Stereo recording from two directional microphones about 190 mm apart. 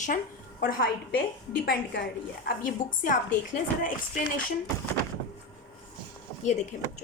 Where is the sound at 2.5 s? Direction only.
45° left (ahead or behind).